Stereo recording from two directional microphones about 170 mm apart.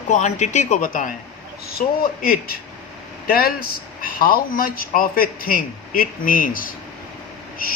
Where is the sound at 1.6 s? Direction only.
60° left (ahead or behind).